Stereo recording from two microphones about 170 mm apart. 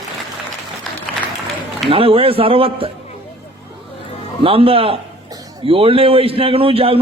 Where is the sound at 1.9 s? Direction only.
35° right (ahead or behind).